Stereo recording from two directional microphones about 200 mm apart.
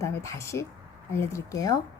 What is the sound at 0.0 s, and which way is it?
Speech, 15° left (ahead or behind).